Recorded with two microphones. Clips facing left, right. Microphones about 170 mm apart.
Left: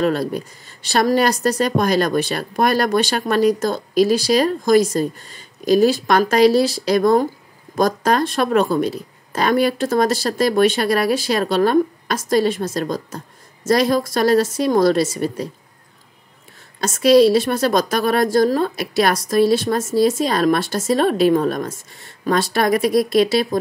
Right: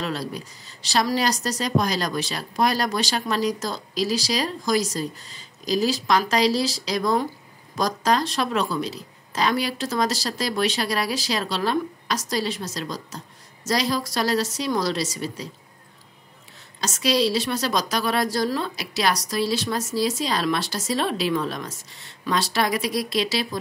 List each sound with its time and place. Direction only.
0.0 s a woman's voice: 55° left (ahead or behind)
16.8 s a woman's voice: 55° left (ahead or behind)